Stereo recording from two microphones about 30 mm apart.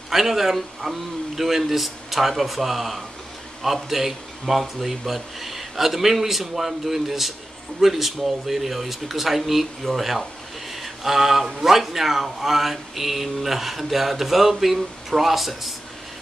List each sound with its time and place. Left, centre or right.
0.1 s a man's voice: centre